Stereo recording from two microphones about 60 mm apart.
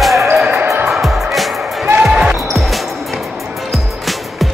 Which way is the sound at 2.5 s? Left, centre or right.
Centre.